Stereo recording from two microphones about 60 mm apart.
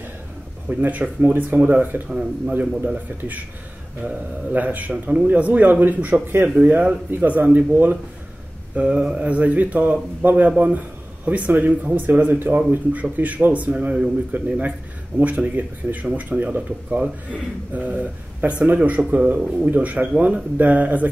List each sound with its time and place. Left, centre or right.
0.7 s speech: right
2.0 s a man's voice: centre
6.6 s speech: right
7.2 s speech: right